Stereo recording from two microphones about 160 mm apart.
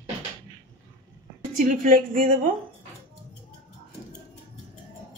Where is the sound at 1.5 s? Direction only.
60° right (ahead or behind).